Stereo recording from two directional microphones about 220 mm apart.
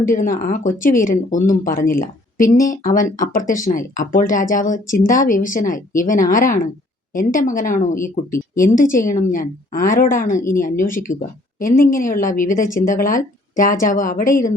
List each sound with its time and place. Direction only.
0.0 s speech: 35° left (ahead or behind)